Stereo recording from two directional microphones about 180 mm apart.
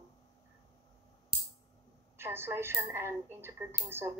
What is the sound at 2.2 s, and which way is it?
A woman's voice, 15° right (ahead or behind).